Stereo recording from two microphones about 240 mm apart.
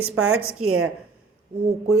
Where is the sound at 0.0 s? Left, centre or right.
Right.